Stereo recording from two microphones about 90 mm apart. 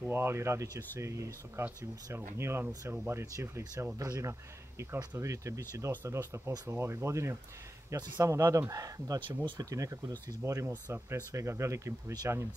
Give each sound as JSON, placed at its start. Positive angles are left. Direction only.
{"t": 0.1, "sound": "speech", "side_deg": -25}